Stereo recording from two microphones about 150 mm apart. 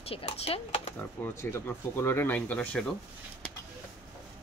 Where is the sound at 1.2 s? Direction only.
15° left (ahead or behind).